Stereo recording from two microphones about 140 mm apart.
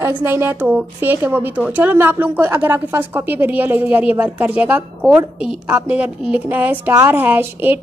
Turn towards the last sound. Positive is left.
turn(degrees=-15)  # may be behind; listen again after turning